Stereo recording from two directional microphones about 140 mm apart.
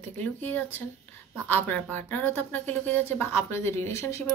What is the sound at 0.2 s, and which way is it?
Speech, 10° left (ahead or behind).